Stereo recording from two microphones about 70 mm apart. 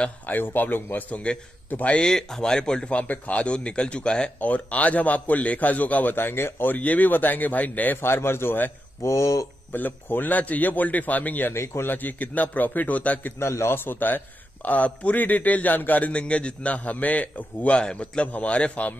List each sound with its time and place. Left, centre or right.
0.3 s a man's voice: left
8.0 s a man's voice: left
9.0 s speech: left
9.7 s a man's voice: left
11.5 s a man's voice: left
11.9 s a man's voice: left
13.4 s a man's voice: left; by 18.9 s centre